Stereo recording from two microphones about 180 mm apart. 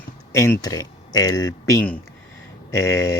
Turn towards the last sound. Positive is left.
turn(degrees=15)  # may be behind; listen again after turning